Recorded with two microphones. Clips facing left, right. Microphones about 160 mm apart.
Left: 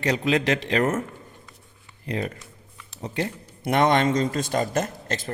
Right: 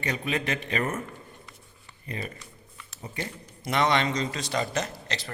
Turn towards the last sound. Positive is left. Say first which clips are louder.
# left 5 dB
turn(degrees=50)  # may be behind; listen again after turning